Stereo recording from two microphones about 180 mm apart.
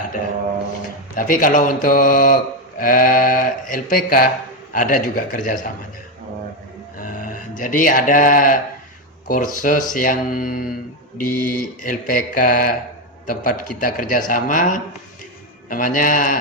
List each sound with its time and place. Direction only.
1.1 s speech: 45° left (ahead or behind)
7.0 s speech: 50° left (ahead or behind)